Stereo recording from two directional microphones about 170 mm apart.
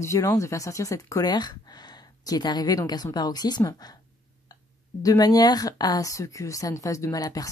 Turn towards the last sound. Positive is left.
turn(degrees=20)  # may be behind; listen again after turning